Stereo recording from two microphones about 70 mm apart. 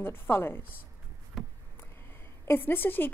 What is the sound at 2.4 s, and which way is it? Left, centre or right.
Speech, left.